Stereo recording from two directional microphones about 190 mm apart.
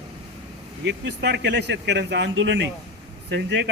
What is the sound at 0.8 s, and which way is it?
Speech, 65° right (ahead or behind).